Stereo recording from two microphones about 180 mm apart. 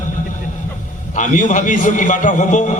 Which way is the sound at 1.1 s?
45° left (ahead or behind).